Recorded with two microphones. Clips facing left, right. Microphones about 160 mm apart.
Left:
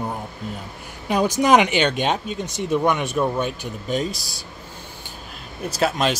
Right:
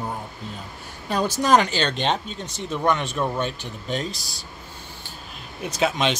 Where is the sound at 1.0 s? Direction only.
15° left (ahead or behind).